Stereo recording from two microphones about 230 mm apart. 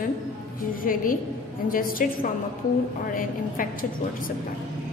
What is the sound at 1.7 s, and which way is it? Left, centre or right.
Speech, left.